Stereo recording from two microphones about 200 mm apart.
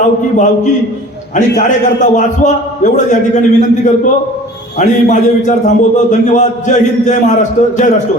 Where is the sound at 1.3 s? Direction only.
40° left (ahead or behind).